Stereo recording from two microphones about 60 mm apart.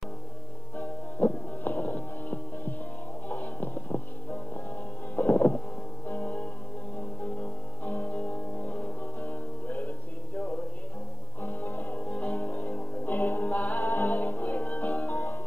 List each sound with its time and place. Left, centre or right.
0.7 s music: left
11.4 s music: left